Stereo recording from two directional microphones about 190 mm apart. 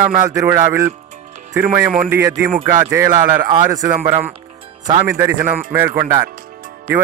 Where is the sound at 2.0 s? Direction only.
10° right (ahead or behind).